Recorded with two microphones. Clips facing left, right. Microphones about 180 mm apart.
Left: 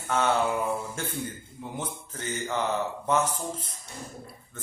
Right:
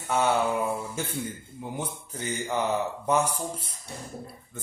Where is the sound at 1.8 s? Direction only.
15° right (ahead or behind).